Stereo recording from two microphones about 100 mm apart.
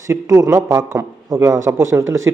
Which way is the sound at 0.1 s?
30° right (ahead or behind).